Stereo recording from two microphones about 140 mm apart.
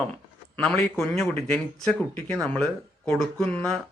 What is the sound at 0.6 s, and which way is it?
A man's voice, 5° left (ahead or behind).